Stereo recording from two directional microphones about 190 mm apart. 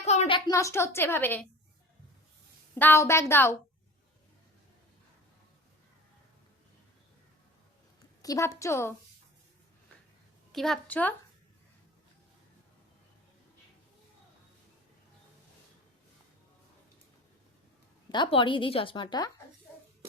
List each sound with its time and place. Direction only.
0.0 s a woman's voice: 35° left (ahead or behind); by 1.5 s 10° left (ahead or behind)
2.7 s a woman's voice: 10° left (ahead or behind)
8.2 s a woman's voice: 15° left (ahead or behind)
10.5 s a woman's voice: centre (ahead or behind)
18.1 s speech: 25° left (ahead or behind)